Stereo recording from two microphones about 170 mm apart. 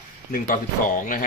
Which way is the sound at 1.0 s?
50° left (ahead or behind).